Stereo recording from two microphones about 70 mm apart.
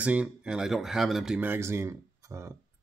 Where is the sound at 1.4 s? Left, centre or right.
Right.